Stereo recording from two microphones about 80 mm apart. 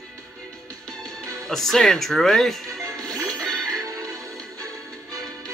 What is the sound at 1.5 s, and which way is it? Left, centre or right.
Speech, centre.